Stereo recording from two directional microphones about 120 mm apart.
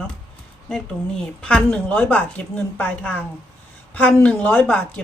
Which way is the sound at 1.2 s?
10° left (ahead or behind).